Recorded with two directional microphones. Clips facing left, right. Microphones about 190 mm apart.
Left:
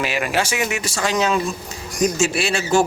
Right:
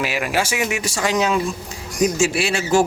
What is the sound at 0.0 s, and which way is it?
Speech, 5° right (ahead or behind).